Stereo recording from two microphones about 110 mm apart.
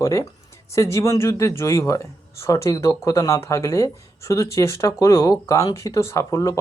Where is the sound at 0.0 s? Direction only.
30° left (ahead or behind).